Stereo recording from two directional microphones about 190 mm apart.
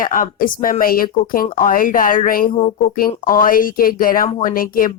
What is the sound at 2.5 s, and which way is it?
Speech, 25° left (ahead or behind).